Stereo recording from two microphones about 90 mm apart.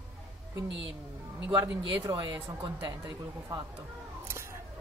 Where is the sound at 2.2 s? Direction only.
55° right (ahead or behind).